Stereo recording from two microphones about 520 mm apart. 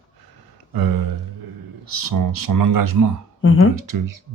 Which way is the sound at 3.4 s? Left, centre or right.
Left.